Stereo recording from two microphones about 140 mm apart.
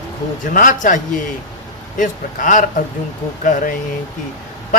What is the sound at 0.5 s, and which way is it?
Speech, 70° left (ahead or behind).